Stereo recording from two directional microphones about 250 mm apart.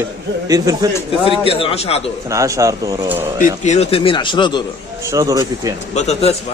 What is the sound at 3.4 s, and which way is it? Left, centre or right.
Speech, left.